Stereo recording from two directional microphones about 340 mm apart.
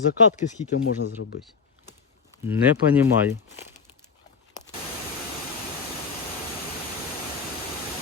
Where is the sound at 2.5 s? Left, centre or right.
Centre.